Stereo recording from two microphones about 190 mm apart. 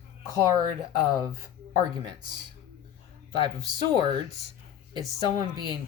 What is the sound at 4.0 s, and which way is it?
Speech, 20° right (ahead or behind).